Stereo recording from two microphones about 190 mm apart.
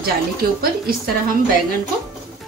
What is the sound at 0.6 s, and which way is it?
Speech, 50° right (ahead or behind).